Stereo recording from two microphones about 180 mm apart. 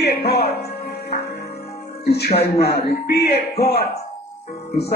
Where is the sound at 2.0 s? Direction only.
65° left (ahead or behind).